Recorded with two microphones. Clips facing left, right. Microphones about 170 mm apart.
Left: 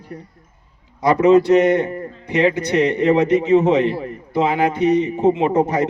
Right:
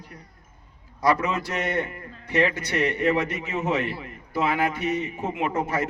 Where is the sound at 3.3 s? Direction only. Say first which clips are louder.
Left 12 dB; 35° left (ahead or behind).